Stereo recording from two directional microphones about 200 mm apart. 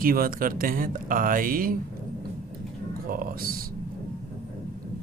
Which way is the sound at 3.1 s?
45° right (ahead or behind).